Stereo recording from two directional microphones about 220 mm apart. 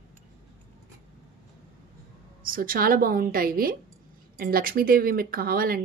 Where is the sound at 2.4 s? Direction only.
40° right (ahead or behind).